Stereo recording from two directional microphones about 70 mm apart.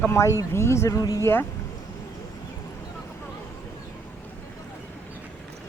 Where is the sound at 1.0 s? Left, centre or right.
Left.